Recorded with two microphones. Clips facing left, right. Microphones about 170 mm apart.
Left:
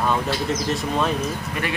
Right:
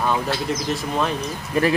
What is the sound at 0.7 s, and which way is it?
Speech, centre (ahead or behind).